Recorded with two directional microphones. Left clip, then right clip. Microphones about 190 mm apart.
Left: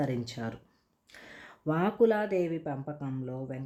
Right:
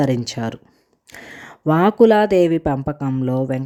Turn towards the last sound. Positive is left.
turn(degrees=-45)  # may be behind; listen again after turning